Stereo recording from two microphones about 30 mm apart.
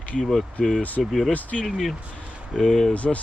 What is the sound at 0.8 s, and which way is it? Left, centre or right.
Speech, left.